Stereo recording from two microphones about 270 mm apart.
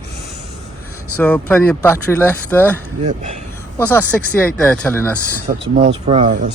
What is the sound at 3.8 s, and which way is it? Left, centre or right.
Speech, centre.